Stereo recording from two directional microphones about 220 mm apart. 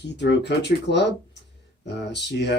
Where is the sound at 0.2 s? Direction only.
50° left (ahead or behind).